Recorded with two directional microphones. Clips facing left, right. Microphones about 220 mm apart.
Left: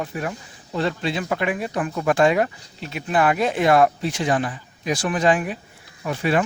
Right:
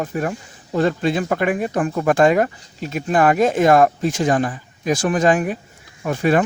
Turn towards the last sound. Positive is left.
turn(degrees=-45)  # may be behind; listen again after turning